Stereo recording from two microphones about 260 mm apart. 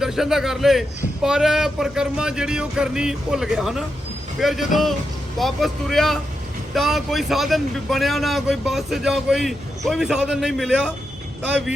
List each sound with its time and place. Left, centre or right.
0.0 s a man's voice: centre